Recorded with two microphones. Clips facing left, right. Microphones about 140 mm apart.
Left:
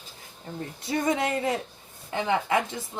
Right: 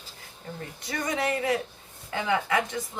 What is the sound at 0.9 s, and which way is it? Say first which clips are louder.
Speech: left 3 dB; 25° left (ahead or behind).